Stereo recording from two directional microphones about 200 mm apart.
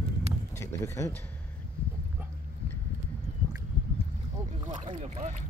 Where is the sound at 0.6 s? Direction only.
15° left (ahead or behind).